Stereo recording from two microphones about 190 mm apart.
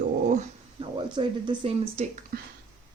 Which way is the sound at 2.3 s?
50° right (ahead or behind).